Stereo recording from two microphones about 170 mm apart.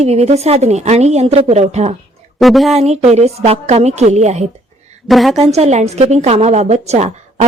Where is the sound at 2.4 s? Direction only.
Centre (ahead or behind).